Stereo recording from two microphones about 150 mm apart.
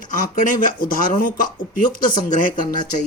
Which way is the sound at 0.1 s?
60° left (ahead or behind).